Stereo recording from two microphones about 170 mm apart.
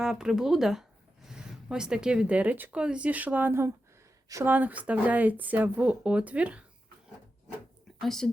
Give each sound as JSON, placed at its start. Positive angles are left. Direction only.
{"t": 0.0, "sound": "speech", "side_deg": -5}
{"t": 8.0, "sound": "speech", "side_deg": 0}